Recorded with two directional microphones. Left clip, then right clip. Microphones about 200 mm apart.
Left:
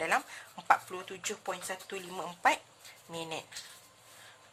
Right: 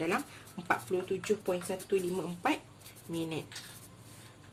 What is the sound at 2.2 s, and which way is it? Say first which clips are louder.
Speech: left 4 dB; 45° left (ahead or behind).